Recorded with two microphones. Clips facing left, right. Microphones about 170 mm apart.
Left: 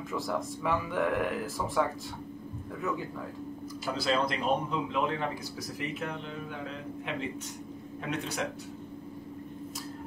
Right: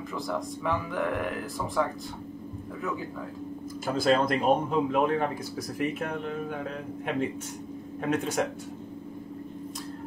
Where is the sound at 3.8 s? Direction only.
50° right (ahead or behind).